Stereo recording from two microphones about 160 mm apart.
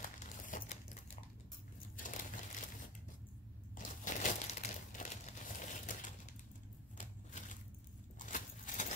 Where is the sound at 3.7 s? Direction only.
50° left (ahead or behind).